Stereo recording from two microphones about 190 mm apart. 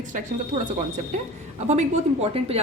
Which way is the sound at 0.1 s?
40° right (ahead or behind).